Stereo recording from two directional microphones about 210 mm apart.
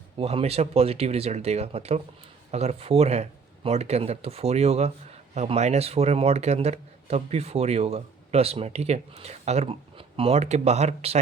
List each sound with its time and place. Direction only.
0.2 s speech: 30° right (ahead or behind)